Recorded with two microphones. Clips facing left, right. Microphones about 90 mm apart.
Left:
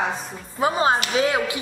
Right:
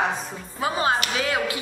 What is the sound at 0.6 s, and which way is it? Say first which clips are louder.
Speech: left 3 dB; 25° left (ahead or behind).